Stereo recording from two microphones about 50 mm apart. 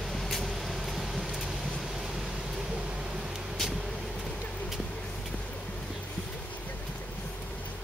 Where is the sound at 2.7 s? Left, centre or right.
Centre.